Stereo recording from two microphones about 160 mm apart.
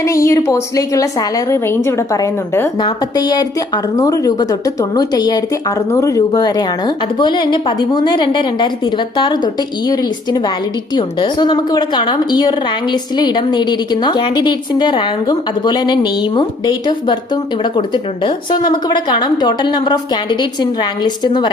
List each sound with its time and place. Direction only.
0.0 s a woman's voice: 20° left (ahead or behind)